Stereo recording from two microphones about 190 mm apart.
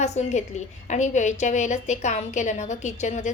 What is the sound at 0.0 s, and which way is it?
A woman's voice, 35° left (ahead or behind).